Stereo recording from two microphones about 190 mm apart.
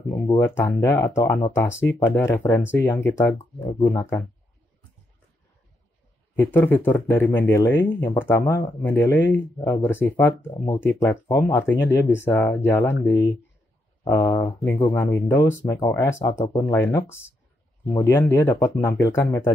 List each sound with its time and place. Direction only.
0.4 s speech: 15° left (ahead or behind)
6.3 s speech: 10° left (ahead or behind)